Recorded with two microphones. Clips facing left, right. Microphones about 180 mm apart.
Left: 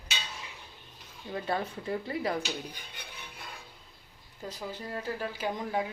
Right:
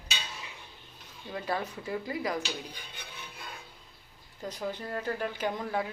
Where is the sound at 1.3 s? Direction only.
25° left (ahead or behind).